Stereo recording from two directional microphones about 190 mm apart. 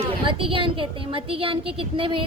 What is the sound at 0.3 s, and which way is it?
Speech, 25° right (ahead or behind).